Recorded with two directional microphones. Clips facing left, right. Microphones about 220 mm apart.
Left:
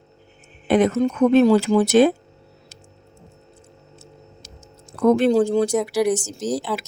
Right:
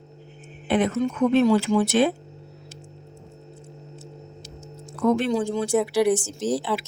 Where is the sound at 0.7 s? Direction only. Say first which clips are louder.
Left 5 dB; 40° left (ahead or behind).